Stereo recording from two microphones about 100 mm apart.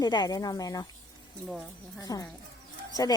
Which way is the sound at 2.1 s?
35° left (ahead or behind).